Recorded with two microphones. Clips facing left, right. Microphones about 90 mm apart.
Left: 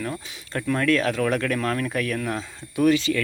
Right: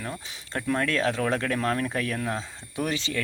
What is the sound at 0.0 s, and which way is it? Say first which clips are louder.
Speech: left 5 dB; 20° right (ahead or behind).